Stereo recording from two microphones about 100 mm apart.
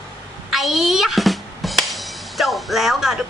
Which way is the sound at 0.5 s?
Centre (ahead or behind).